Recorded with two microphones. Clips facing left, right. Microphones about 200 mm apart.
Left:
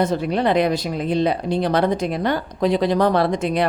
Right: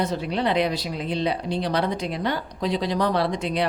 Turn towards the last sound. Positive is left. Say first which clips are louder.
# left 5 dB
turn(degrees=50)  # may be behind; listen again after turning